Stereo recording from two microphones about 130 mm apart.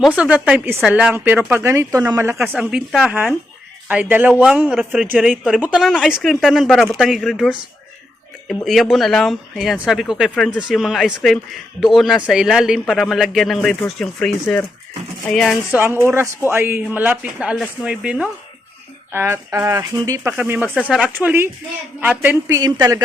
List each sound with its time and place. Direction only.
0.2 s a man's voice: 10° right (ahead or behind)
2.6 s a man's voice: 5° right (ahead or behind)
8.6 s speech: centre (ahead or behind)
15.7 s a man's voice: 15° right (ahead or behind)
19.1 s speech: 20° right (ahead or behind)
20.3 s a man's voice: 10° right (ahead or behind)
22.4 s speech: 25° right (ahead or behind)